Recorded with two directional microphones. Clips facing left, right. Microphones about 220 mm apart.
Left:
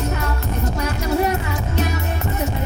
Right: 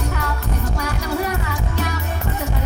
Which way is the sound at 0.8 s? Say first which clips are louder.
Left 5 dB; 25° left (ahead or behind).